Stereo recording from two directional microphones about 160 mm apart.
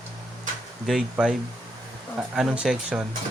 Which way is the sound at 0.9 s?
5° right (ahead or behind).